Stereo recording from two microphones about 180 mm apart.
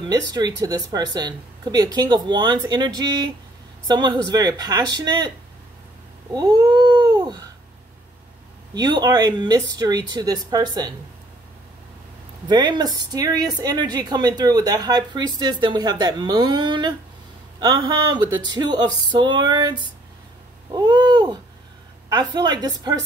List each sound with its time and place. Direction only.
0.0 s speech: 20° right (ahead or behind)
6.3 s a sound: 25° right (ahead or behind)
8.7 s speech: 25° right (ahead or behind)
12.4 s speech: 25° right (ahead or behind)